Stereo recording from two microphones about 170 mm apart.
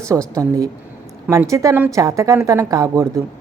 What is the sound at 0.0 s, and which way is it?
A woman's voice, 20° right (ahead or behind).